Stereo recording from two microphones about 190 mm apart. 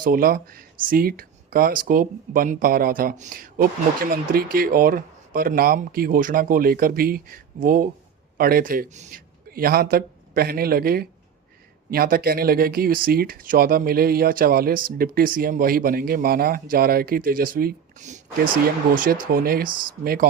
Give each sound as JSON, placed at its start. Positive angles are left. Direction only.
{"t": 0.0, "sound": "speech", "side_deg": -50}